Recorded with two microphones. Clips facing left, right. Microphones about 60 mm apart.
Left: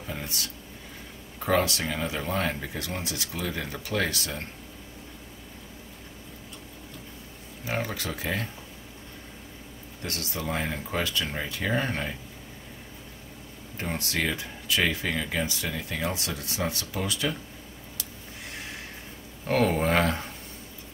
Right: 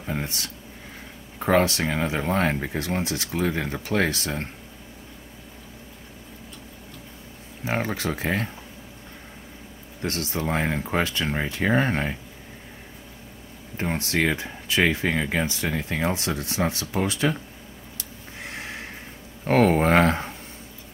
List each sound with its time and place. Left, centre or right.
0.0 s a sound: right
1.4 s speech: right
7.6 s speech: right
10.0 s speech: right
13.7 s speech: right
18.4 s a sound: right
19.4 s speech: right